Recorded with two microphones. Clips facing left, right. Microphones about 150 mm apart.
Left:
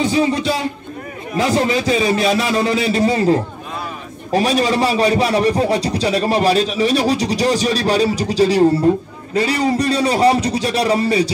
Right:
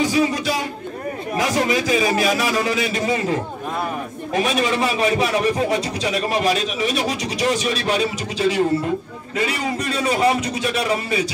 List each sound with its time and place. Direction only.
0.0 s a man's voice: 30° left (ahead or behind)